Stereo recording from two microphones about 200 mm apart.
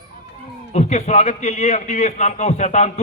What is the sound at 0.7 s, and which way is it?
A man's voice, 35° left (ahead or behind).